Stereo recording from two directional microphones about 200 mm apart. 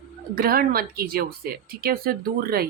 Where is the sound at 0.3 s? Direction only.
45° right (ahead or behind).